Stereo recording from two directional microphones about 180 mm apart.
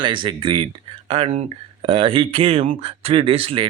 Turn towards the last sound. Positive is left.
turn(degrees=-30)  # may be behind; listen again after turning